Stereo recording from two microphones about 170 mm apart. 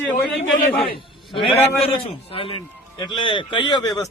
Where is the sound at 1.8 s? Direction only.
30° left (ahead or behind).